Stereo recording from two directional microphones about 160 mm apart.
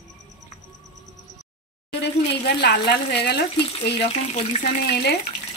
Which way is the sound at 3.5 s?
35° left (ahead or behind).